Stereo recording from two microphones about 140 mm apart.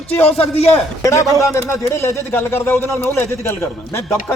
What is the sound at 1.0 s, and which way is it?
A man's voice, 20° left (ahead or behind).